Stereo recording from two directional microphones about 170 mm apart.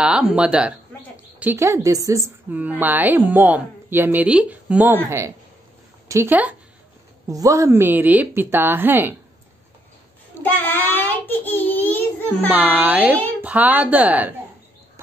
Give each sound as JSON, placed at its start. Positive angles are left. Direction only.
{"t": 0.0, "sound": "a woman's voice", "side_deg": -5}
{"t": 10.4, "sound": "child singing", "side_deg": 10}
{"t": 12.4, "sound": "a woman's voice", "side_deg": -10}